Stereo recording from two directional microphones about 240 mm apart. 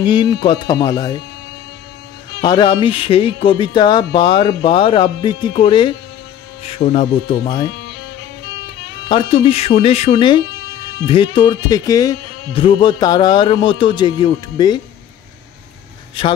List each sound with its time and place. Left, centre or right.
0.0 s speech: centre
2.4 s speech: centre
9.1 s speech: left